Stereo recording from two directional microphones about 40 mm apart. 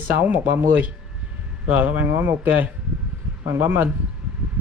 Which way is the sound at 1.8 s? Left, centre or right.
Right.